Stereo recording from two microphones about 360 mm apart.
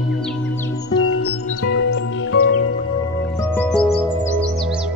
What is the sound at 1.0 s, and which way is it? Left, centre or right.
Music, left.